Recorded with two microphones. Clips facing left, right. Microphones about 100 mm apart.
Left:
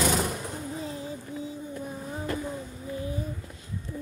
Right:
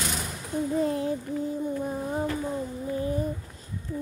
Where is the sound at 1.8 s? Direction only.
45° right (ahead or behind).